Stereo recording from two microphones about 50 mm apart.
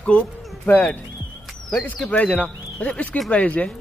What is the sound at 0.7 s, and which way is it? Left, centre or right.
Speech, left.